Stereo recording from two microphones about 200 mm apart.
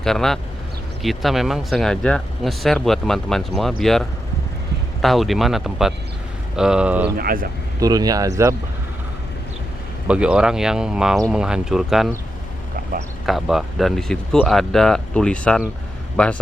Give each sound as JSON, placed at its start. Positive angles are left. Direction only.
{"t": 0.0, "sound": "speech", "side_deg": 0}
{"t": 5.0, "sound": "speech", "side_deg": 0}
{"t": 7.8, "sound": "speech", "side_deg": -20}
{"t": 10.1, "sound": "speech", "side_deg": -5}
{"t": 13.2, "sound": "speech", "side_deg": 0}